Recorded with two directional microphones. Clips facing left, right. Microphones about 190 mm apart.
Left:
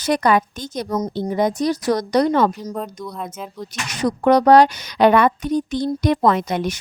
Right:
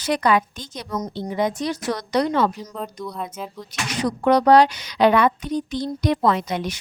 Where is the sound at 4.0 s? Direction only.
45° left (ahead or behind).